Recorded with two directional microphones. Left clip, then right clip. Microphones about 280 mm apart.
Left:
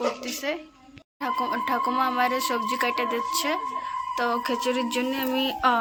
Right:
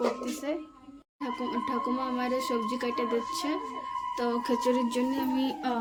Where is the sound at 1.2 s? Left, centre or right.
Centre.